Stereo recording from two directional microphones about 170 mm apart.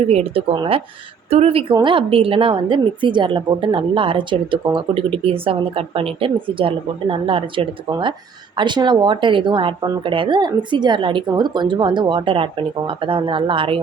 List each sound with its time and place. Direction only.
0.0 s a woman's voice: 35° right (ahead or behind)